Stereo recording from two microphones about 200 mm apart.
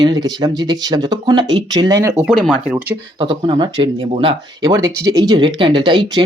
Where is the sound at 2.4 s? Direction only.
Centre (ahead or behind).